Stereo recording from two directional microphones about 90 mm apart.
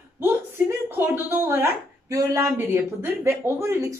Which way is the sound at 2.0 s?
35° right (ahead or behind).